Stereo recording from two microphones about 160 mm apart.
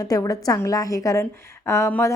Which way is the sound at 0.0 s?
20° left (ahead or behind).